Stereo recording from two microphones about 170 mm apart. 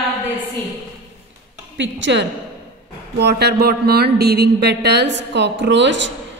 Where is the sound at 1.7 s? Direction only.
90° right.